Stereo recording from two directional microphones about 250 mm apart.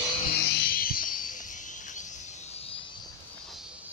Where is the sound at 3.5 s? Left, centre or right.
Centre.